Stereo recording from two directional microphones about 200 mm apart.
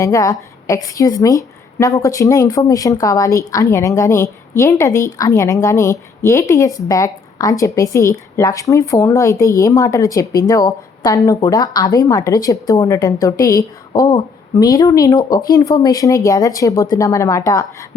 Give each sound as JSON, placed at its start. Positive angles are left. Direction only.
{"t": 0.0, "sound": "a woman's voice", "side_deg": 15}